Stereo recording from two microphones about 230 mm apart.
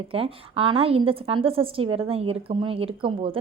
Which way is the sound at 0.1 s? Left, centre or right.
Right.